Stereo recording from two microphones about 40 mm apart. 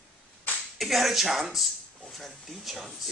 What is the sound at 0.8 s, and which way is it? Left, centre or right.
Speech, centre.